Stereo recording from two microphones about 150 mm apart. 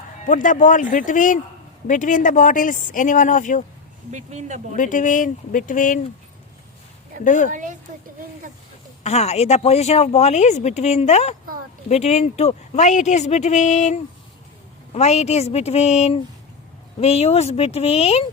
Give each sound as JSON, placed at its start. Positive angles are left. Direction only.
{"t": 0.3, "sound": "speech", "side_deg": 60}
{"t": 4.1, "sound": "speech", "side_deg": -50}
{"t": 4.8, "sound": "speech", "side_deg": 60}
{"t": 7.3, "sound": "speech", "side_deg": 60}
{"t": 7.5, "sound": "a woman's voice", "side_deg": -60}
{"t": 9.0, "sound": "speech", "side_deg": 45}